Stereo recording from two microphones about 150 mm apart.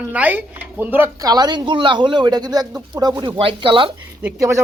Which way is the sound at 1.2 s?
25° right (ahead or behind).